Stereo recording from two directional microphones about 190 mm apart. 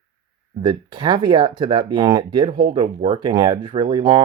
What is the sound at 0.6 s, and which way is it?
Speech, 25° right (ahead or behind).